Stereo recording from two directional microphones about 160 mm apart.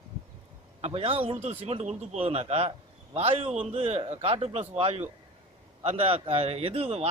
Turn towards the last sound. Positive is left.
turn(degrees=-40)  # may be behind; listen again after turning